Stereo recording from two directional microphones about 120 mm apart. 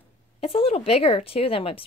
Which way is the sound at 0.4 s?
50° left (ahead or behind).